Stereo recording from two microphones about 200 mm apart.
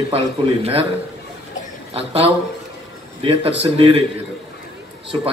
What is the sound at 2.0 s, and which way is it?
Speech, 30° right (ahead or behind).